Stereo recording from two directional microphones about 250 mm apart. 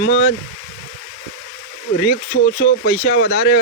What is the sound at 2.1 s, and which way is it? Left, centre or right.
Speech, left.